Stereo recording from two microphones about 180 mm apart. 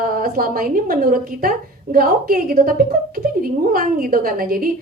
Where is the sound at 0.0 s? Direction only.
55° right (ahead or behind).